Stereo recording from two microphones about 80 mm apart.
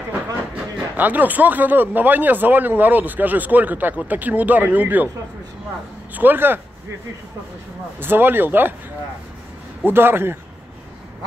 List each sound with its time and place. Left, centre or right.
0.7 s speech: right
6.1 s speech: right
8.0 s speech: right
9.8 s speech: right